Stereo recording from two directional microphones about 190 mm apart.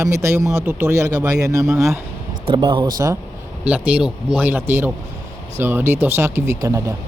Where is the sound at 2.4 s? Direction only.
25° right (ahead or behind).